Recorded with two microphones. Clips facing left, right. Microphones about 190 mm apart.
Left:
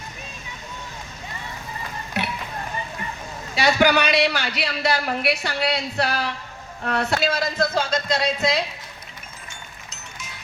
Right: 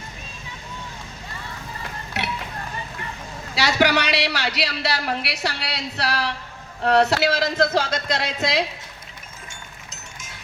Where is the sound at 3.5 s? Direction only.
70° right (ahead or behind).